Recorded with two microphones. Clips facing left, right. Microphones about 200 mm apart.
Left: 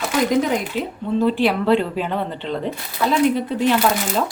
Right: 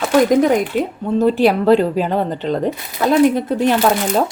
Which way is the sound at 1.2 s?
40° right (ahead or behind).